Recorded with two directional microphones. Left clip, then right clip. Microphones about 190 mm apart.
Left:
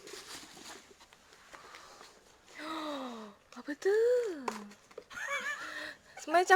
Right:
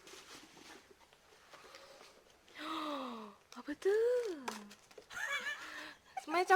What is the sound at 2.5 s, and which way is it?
Gasp, 5° right (ahead or behind).